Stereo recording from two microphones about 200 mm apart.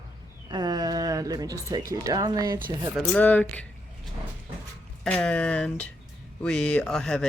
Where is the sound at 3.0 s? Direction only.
5° left (ahead or behind).